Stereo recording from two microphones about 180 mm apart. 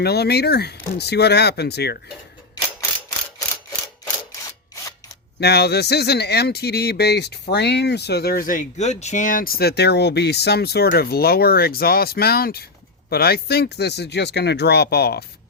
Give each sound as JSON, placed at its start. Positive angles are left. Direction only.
{"t": 0.0, "sound": "speech", "side_deg": 65}
{"t": 5.4, "sound": "speech", "side_deg": 65}